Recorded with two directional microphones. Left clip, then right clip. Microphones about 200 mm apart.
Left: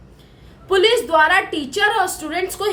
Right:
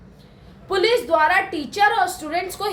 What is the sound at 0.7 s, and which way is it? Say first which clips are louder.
A woman's voice: left 3 dB; 20° left (ahead or behind).